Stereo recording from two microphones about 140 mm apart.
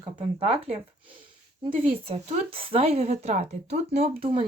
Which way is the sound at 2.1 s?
50° right (ahead or behind).